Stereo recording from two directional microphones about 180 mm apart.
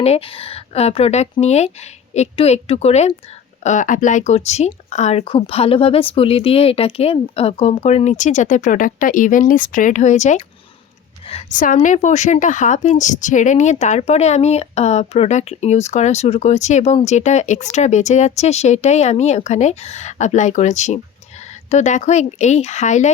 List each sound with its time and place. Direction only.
0.0 s a woman's voice: 35° left (ahead or behind)
11.5 s a woman's voice: 45° left (ahead or behind)